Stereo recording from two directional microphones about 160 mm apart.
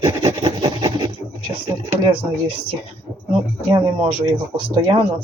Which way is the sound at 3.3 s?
30° right (ahead or behind).